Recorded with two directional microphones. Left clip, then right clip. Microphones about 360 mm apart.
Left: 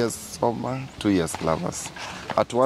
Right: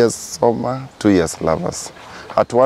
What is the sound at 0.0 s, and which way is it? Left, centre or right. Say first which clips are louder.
Speech: right 9 dB; right.